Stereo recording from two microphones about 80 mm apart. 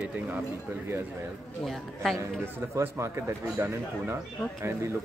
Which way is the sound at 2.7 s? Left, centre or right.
Right.